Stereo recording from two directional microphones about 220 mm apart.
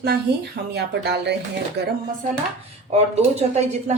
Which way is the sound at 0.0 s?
45° right (ahead or behind).